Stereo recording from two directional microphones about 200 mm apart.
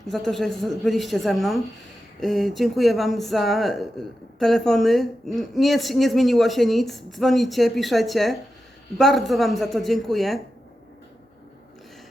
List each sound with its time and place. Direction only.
0.1 s speech: centre (ahead or behind)